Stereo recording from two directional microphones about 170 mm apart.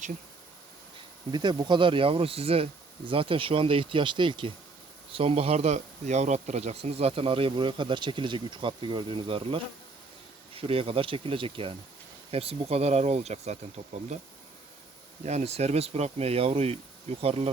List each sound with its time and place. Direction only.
1.3 s speech: 25° right (ahead or behind)
15.2 s speech: 40° right (ahead or behind)